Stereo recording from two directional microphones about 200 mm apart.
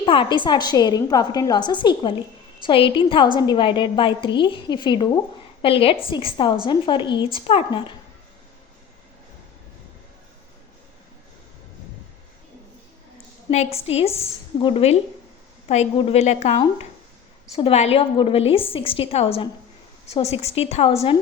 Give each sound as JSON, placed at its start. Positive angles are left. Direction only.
{"t": 0.0, "sound": "a woman's voice", "side_deg": 25}
{"t": 13.5, "sound": "a woman's voice", "side_deg": 30}